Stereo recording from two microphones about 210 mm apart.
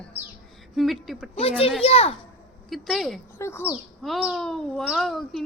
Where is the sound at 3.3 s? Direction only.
10° left (ahead or behind).